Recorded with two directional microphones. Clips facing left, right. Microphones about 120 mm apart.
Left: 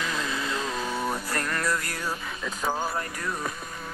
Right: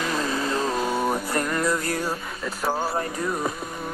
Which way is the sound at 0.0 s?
40° right (ahead or behind).